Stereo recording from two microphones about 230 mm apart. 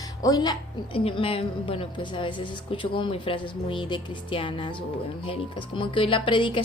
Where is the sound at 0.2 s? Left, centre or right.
Centre.